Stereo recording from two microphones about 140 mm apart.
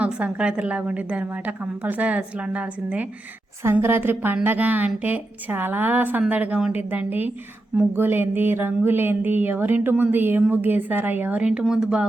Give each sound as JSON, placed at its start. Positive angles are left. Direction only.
{"t": 0.0, "sound": "speech", "side_deg": -10}